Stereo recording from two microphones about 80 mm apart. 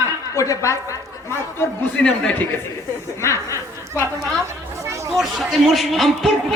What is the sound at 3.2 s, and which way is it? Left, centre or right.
Speech, left.